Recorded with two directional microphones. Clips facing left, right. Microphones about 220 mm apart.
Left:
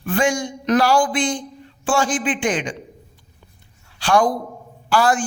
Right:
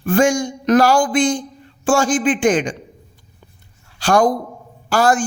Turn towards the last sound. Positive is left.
turn(degrees=-45)  # may be behind; listen again after turning